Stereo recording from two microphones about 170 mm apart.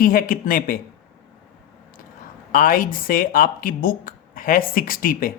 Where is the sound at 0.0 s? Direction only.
55° left (ahead or behind).